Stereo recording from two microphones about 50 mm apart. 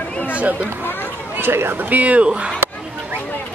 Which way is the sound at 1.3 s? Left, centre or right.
Right.